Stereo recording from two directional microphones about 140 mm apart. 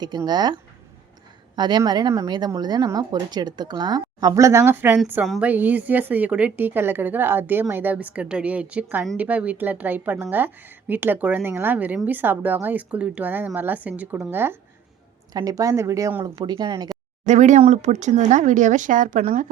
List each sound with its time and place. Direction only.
0.0 s speech: 30° right (ahead or behind)
5.2 s a woman's voice: 5° right (ahead or behind)
15.3 s speech: 25° right (ahead or behind)
17.2 s speech: 60° right (ahead or behind)